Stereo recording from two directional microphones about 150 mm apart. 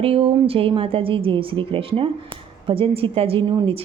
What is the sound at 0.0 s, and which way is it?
A woman's voice, 40° right (ahead or behind).